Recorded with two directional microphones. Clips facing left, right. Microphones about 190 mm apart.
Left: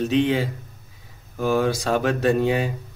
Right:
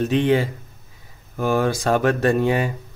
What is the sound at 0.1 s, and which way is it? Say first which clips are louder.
Speech: right 2 dB; 50° right (ahead or behind).